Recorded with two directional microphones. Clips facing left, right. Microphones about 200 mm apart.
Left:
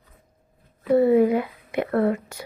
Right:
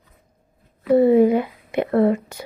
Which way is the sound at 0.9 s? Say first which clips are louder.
Right 3 dB; 25° right (ahead or behind).